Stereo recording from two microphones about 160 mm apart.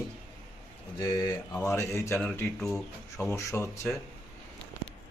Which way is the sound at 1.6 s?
15° left (ahead or behind).